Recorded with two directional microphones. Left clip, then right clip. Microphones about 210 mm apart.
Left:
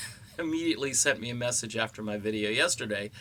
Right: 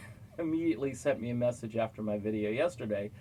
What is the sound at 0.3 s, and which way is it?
Speech, 20° left (ahead or behind).